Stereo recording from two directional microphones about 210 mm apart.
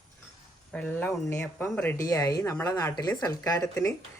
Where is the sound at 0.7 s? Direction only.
5° left (ahead or behind).